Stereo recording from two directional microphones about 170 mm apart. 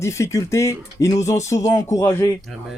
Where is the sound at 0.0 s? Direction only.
15° left (ahead or behind).